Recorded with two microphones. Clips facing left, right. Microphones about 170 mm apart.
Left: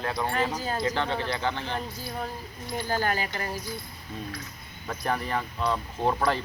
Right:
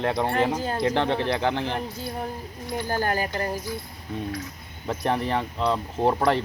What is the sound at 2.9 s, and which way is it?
Speech, 45° right (ahead or behind).